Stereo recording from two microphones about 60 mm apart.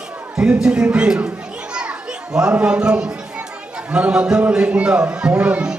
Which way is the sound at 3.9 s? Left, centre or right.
Centre.